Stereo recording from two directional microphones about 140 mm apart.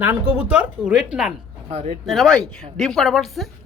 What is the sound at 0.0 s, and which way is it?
Speech, 15° right (ahead or behind).